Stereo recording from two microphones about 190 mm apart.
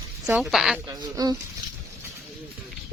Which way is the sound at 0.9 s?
20° right (ahead or behind).